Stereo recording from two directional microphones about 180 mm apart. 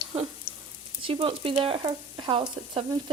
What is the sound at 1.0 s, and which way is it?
Speech, 30° right (ahead or behind).